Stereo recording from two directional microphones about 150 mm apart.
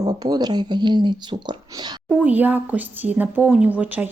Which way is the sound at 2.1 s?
10° right (ahead or behind).